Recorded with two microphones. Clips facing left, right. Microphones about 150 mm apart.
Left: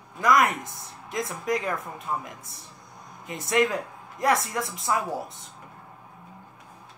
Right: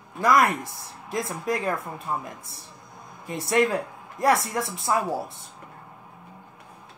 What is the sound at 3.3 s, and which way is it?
Speech, 25° right (ahead or behind).